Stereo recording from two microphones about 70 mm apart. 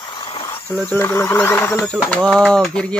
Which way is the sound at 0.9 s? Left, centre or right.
Left.